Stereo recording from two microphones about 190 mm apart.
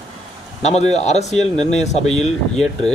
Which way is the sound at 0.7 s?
35° left (ahead or behind).